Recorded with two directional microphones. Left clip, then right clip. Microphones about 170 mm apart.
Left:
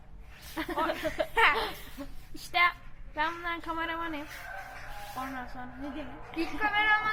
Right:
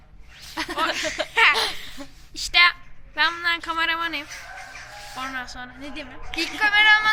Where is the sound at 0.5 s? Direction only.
25° right (ahead or behind).